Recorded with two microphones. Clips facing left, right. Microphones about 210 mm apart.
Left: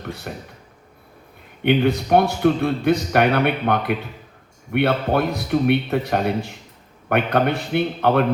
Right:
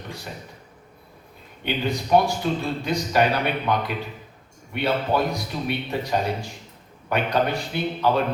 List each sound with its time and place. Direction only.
0.0 s speech: 60° left (ahead or behind)
1.6 s a man's voice: 60° left (ahead or behind)